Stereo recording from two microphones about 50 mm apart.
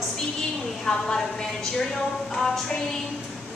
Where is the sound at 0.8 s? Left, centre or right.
Centre.